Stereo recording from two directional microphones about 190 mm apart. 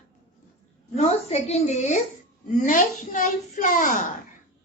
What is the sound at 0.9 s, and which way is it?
A woman's voice, 35° left (ahead or behind).